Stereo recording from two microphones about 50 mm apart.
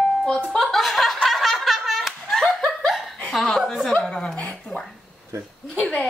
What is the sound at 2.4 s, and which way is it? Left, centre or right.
Chuckle, centre.